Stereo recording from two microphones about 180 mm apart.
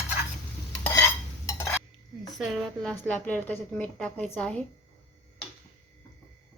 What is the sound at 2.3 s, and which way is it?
A woman's voice, centre (ahead or behind).